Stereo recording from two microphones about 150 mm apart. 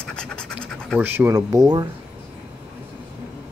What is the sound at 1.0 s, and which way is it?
Speech, 15° right (ahead or behind).